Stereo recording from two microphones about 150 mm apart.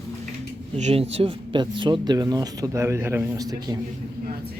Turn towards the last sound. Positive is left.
turn(degrees=-25)  # may be behind; listen again after turning